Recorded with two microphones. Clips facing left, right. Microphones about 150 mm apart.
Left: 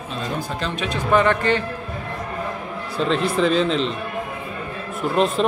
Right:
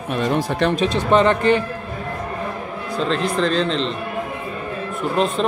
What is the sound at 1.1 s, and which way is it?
Speech, 20° right (ahead or behind).